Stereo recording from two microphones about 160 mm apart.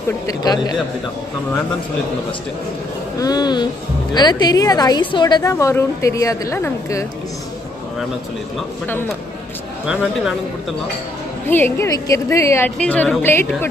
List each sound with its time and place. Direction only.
0.3 s a woman's voice: 25° left (ahead or behind)
3.2 s a woman's voice: 25° left (ahead or behind)
8.8 s speech: 15° left (ahead or behind)
11.4 s speech: 15° left (ahead or behind)